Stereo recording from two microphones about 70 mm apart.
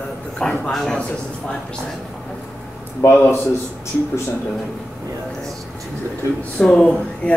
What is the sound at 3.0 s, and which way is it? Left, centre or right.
Speech, left.